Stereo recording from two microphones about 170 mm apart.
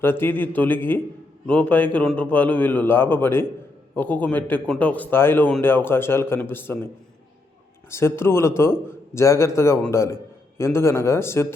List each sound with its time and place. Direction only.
0.0 s a man's voice: 15° left (ahead or behind)
7.9 s a man's voice: 15° left (ahead or behind)